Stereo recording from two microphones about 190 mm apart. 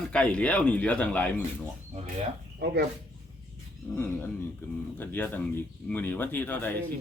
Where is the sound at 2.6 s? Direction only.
55° right (ahead or behind).